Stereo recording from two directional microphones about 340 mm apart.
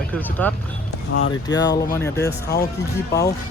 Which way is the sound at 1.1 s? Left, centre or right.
Left.